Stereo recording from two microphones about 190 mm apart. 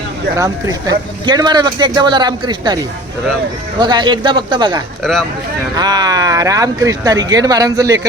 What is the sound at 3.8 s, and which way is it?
Speech, 25° right (ahead or behind).